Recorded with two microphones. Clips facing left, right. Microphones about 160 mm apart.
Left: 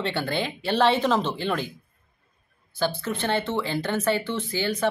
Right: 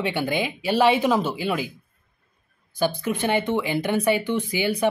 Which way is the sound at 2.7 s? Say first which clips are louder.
Right 3 dB; 15° right (ahead or behind).